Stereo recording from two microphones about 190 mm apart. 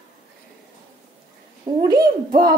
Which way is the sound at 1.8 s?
25° right (ahead or behind).